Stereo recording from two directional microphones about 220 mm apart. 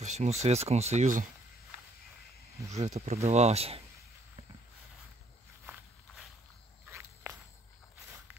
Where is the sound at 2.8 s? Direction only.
30° right (ahead or behind).